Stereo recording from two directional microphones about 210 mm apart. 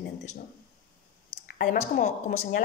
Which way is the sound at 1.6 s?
40° left (ahead or behind).